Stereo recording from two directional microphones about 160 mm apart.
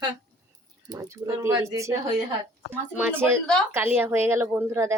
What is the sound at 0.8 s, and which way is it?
A woman's voice, 20° right (ahead or behind).